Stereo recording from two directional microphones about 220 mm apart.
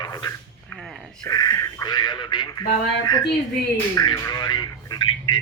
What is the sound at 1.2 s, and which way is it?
Speech, 15° left (ahead or behind).